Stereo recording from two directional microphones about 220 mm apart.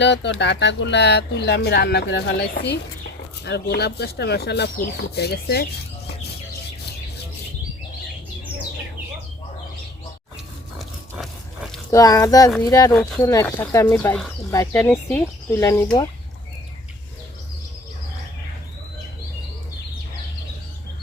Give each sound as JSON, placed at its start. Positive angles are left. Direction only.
{"t": 0.0, "sound": "speech", "side_deg": 50}
{"t": 11.9, "sound": "speech", "side_deg": 15}